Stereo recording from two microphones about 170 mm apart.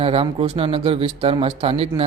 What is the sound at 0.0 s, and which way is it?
Speech, 35° right (ahead or behind).